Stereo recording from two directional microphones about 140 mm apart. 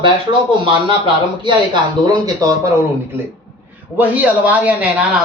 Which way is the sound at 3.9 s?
10° right (ahead or behind).